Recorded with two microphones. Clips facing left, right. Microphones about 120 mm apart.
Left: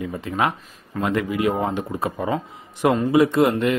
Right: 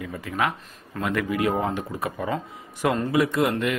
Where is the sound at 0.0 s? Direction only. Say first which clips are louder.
Left 3 dB; 25° left (ahead or behind).